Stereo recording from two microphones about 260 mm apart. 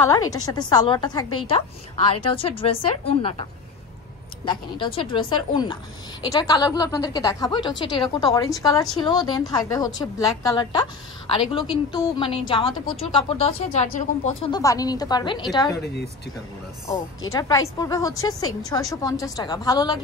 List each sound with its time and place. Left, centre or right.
0.1 s a woman's voice: centre
4.5 s a woman's voice: centre
17.3 s a woman's voice: centre